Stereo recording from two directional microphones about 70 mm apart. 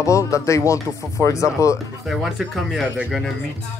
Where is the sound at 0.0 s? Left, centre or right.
Left.